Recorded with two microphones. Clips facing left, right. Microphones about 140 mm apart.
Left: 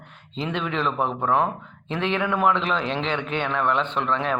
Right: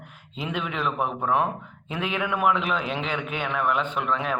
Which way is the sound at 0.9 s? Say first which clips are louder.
Left 2 dB; 30° left (ahead or behind).